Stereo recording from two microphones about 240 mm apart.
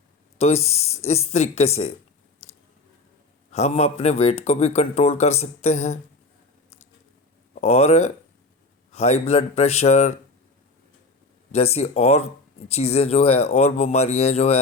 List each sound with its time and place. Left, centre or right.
0.3 s speech: left
3.5 s speech: left
7.5 s speech: left
8.9 s a sound: left
9.2 s speech: left
11.5 s speech: left